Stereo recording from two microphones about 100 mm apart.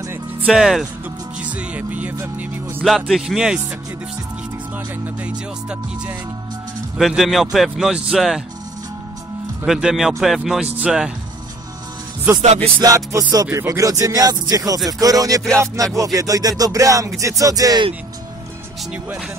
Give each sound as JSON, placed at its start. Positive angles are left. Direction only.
{"t": 0.5, "sound": "a man's voice", "side_deg": -5}
{"t": 1.4, "sound": "music", "side_deg": -15}
{"t": 2.8, "sound": "a man's voice", "side_deg": 0}
{"t": 7.0, "sound": "a man's voice", "side_deg": 0}
{"t": 9.7, "sound": "a man's voice", "side_deg": -5}
{"t": 12.8, "sound": "music", "side_deg": -35}